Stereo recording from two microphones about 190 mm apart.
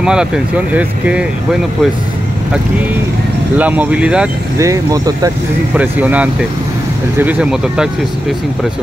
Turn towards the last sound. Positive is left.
turn(degrees=-5)  # may be behind; listen again after turning